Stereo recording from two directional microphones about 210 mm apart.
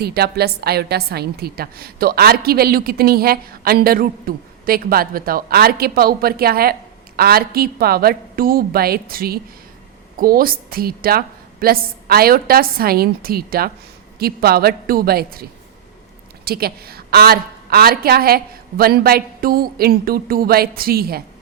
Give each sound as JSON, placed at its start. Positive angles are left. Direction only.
{"t": 0.0, "sound": "a woman's voice", "side_deg": -50}